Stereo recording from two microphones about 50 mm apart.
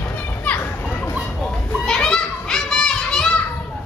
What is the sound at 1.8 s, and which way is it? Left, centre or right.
Children playing, centre.